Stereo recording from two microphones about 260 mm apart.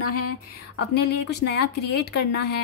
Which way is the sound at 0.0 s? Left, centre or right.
Left.